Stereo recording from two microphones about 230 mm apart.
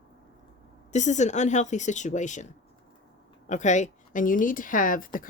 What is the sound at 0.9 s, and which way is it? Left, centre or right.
Speech, left.